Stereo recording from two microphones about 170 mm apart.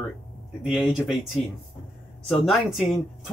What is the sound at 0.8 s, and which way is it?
Speech, centre (ahead or behind).